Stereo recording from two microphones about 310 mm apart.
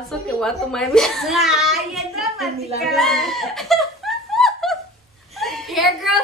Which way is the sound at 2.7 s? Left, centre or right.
Centre.